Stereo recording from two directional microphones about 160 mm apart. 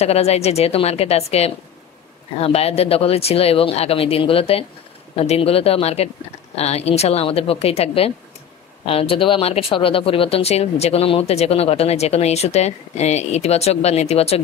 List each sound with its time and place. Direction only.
0.0 s speech: 40° left (ahead or behind)